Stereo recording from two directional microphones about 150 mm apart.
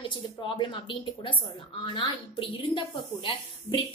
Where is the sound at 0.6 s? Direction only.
35° left (ahead or behind).